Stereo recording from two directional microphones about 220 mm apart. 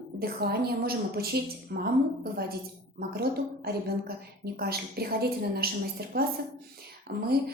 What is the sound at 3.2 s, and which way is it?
A woman's voice, 45° right (ahead or behind).